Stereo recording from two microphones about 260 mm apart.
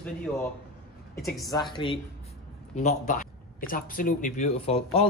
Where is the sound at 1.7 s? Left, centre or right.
Centre.